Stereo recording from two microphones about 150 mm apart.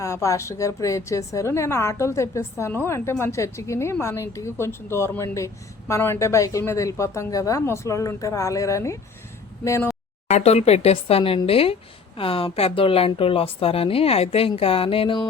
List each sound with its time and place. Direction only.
0.0 s a woman's voice: 20° left (ahead or behind)
10.2 s speech: 50° left (ahead or behind)